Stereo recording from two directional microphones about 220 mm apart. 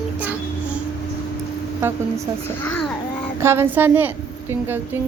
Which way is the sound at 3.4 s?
10° right (ahead or behind).